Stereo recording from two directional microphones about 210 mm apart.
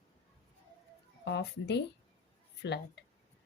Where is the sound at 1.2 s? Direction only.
55° left (ahead or behind).